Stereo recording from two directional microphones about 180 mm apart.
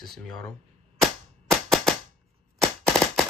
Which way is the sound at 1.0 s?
Centre (ahead or behind).